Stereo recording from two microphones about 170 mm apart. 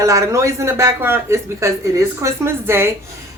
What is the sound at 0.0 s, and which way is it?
Speech, 20° right (ahead or behind).